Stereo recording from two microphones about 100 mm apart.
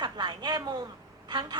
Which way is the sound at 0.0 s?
45° right (ahead or behind).